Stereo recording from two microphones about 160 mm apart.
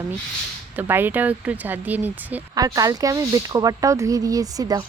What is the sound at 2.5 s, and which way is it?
Speech, 25° right (ahead or behind).